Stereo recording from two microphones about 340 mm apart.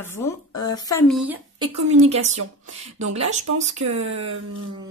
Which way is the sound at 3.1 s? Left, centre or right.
Centre.